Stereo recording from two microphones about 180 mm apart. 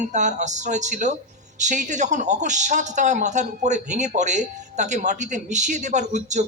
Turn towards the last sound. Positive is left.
turn(degrees=-40)  # may be behind; listen again after turning